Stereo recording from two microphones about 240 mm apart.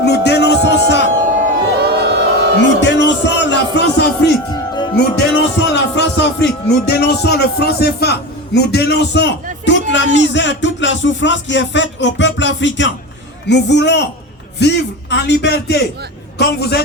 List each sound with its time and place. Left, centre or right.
0.0 s music: left
1.7 s a sound: right
2.8 s music: left
4.7 s music: centre
4.9 s speech: left
9.9 s music: left